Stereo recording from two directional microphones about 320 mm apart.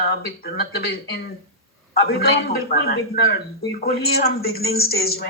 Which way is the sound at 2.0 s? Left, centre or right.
Left.